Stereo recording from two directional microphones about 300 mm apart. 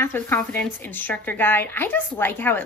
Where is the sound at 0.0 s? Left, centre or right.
Centre.